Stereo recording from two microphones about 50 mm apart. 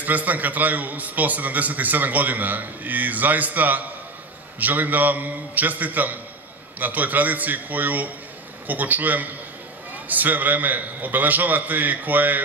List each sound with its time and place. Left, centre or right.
0.0 s a man's voice: right